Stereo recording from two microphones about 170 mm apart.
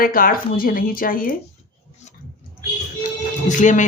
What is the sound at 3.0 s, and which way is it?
Music, 45° left (ahead or behind).